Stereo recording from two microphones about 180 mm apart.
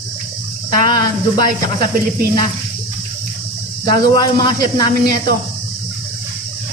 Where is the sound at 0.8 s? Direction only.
50° right (ahead or behind).